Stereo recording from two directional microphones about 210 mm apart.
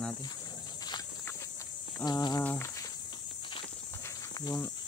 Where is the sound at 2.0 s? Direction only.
20° left (ahead or behind).